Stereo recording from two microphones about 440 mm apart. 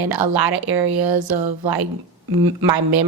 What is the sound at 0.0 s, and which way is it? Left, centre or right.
A woman's voice, right.